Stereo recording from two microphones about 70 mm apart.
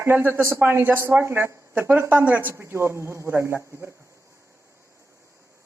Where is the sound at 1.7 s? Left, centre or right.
Right.